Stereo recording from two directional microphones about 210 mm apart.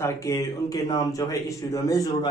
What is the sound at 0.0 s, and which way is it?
A man's voice, 15° left (ahead or behind).